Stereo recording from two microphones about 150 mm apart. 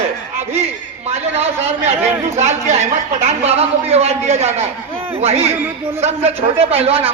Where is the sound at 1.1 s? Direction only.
45° right (ahead or behind).